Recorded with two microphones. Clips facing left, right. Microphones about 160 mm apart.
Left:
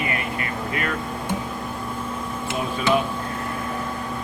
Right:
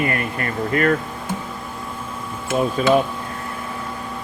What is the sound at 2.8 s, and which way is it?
Speech, 40° right (ahead or behind).